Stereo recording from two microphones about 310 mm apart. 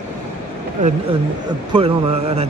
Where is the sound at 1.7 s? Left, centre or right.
Centre.